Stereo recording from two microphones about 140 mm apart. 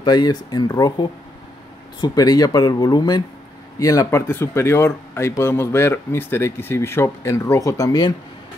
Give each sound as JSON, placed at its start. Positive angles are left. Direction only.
{"t": 0.0, "sound": "speech", "side_deg": 30}